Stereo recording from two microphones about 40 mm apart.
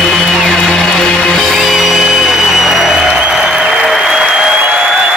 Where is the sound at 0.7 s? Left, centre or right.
Centre.